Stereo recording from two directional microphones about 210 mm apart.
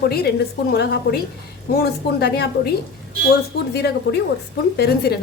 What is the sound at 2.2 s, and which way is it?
Speech, 50° left (ahead or behind).